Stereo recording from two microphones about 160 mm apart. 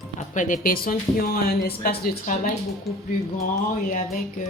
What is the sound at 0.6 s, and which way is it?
A man's voice, 65° left (ahead or behind).